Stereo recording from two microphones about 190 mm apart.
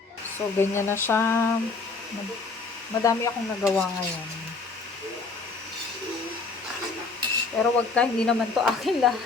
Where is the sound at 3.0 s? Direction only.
15° left (ahead or behind).